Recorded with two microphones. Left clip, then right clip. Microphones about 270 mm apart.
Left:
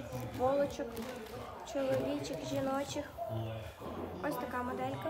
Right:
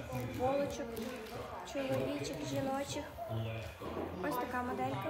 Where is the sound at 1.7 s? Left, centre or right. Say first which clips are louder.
Left 3 dB; centre.